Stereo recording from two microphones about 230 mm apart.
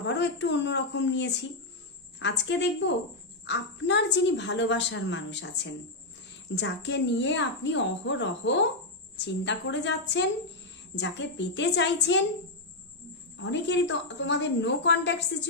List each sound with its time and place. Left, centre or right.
0.0 s a woman's voice: left
6.6 s a woman's voice: left
13.3 s a woman's voice: left